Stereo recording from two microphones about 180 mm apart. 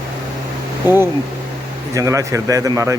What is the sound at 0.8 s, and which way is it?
Speech, 10° right (ahead or behind).